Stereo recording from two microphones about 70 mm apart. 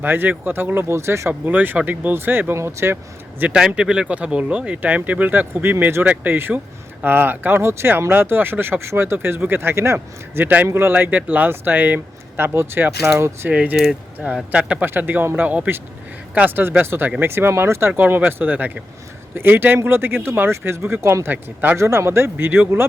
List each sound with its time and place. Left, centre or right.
0.0 s speech: right
1.3 s speech: right
2.6 s speech: right
3.5 s speech: centre; by 10.4 s right
10.4 s speech: right
13.5 s speech: centre
13.7 s speech: centre
14.5 s speech: centre
14.8 s speech: right
21.8 s speech: right